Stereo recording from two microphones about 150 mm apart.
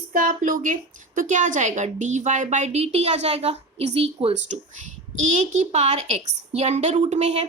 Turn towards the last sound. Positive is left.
turn(degrees=-50)  # may be behind; listen again after turning